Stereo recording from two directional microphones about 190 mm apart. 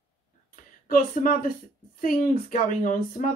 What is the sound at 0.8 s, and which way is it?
Speech, 45° left (ahead or behind).